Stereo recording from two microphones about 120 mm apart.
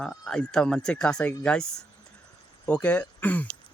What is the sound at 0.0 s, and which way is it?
Speech, 5° left (ahead or behind).